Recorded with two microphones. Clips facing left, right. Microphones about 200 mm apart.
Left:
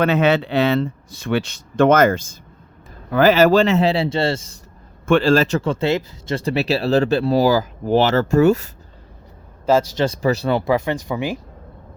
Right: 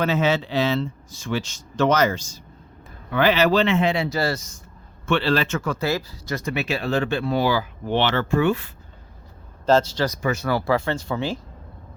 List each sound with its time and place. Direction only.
0.0 s speech: 60° left (ahead or behind)
3.1 s speech: 45° left (ahead or behind); by 4.5 s 25° left (ahead or behind)
5.0 s speech: 50° left (ahead or behind)
9.6 s speech: 10° left (ahead or behind)
10.2 s speech: 35° left (ahead or behind)
10.5 s speech: 20° left (ahead or behind)